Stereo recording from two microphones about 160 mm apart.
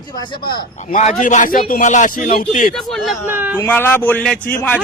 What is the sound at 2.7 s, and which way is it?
Speech, centre (ahead or behind).